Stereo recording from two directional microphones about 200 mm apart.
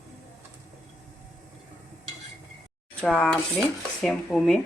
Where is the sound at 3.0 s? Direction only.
5° left (ahead or behind).